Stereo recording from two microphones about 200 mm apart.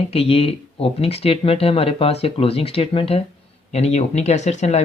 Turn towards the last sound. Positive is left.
turn(degrees=35)  # may be behind; listen again after turning